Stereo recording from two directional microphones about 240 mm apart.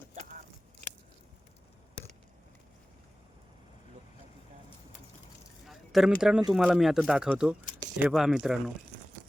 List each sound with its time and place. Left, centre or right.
0.1 s biting: right
5.6 s a sound: centre
6.5 s speech: centre